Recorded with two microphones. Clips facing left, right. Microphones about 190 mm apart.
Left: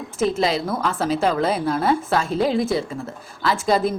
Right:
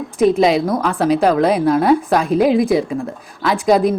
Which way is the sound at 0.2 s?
15° right (ahead or behind).